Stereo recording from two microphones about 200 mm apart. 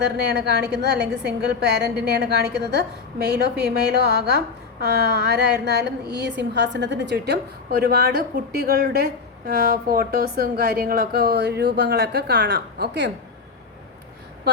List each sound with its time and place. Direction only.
0.0 s a woman's voice: 55° right (ahead or behind)